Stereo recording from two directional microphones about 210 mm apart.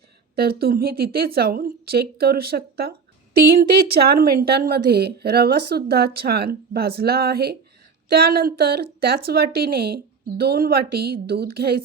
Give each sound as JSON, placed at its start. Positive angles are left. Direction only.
{"t": 0.3, "sound": "speech", "side_deg": -45}